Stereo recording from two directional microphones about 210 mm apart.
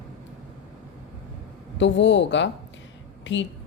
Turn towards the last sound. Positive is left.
turn(degrees=60)  # may be behind; listen again after turning